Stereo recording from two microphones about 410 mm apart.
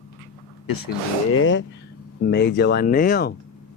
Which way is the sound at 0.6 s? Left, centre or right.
Left.